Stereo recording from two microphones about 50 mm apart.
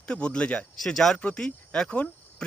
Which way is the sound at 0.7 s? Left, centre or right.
Centre.